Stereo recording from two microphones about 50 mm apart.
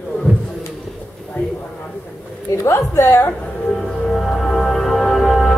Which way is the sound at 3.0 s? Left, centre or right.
Left.